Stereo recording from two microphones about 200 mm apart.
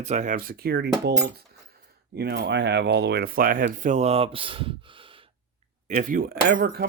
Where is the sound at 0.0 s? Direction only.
35° right (ahead or behind).